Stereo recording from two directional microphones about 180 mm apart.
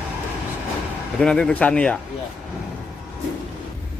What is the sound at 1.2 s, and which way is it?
Speech, 5° left (ahead or behind).